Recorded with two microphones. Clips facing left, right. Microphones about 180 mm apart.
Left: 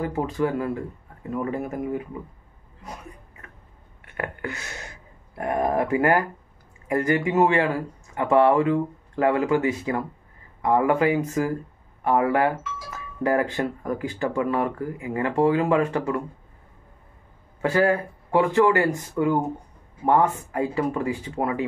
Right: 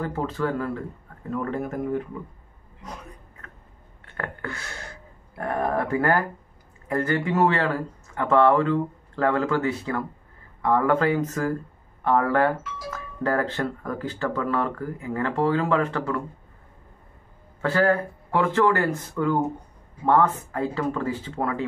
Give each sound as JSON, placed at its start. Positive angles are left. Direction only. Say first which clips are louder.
{"t": 0.0, "sound": "speech", "louder": "left 2 dB", "side_deg": 10}
{"t": 4.0, "sound": "a sound", "louder": "left 2 dB", "side_deg": 15}
{"t": 5.4, "sound": "speech", "louder": "left 2 dB", "side_deg": 15}
{"t": 17.6, "sound": "a man's voice", "louder": "left 1 dB", "side_deg": 15}
{"t": 20.3, "sound": "speech", "louder": "left 2 dB", "side_deg": 15}